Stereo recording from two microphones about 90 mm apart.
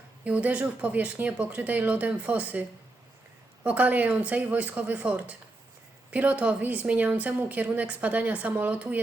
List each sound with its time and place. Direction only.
0.3 s a woman's voice: 15° right (ahead or behind)